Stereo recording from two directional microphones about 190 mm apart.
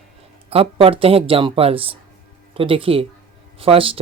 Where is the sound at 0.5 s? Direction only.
30° right (ahead or behind).